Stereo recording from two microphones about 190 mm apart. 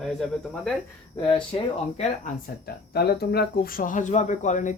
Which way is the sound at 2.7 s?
55° left (ahead or behind).